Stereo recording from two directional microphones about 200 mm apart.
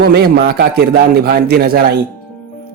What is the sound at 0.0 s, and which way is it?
Speech, 50° right (ahead or behind).